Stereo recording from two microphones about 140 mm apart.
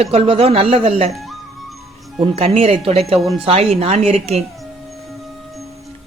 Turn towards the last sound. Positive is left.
turn(degrees=-45)  # may be behind; listen again after turning